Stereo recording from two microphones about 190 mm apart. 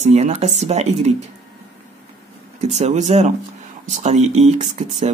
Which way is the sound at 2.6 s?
35° right (ahead or behind).